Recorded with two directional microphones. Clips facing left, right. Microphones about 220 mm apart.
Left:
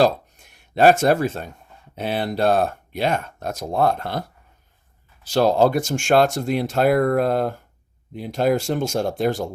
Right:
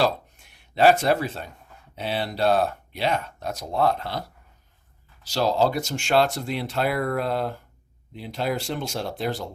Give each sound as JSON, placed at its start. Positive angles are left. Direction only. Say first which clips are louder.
{"t": 0.0, "sound": "speech", "louder": "left 5 dB", "side_deg": 45}
{"t": 5.2, "sound": "speech", "louder": "left 5 dB", "side_deg": 55}